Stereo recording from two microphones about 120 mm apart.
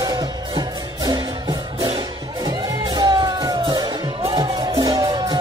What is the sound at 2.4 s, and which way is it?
Music, 35° right (ahead or behind).